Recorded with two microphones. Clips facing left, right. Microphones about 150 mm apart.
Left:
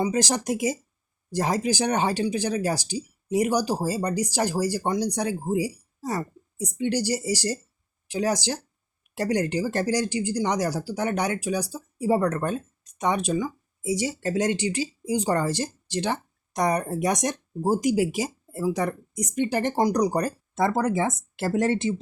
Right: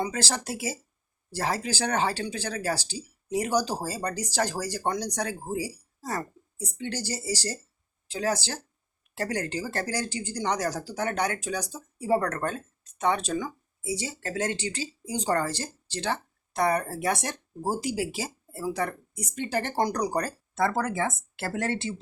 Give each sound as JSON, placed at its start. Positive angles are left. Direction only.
{"t": 0.0, "sound": "speech", "side_deg": 15}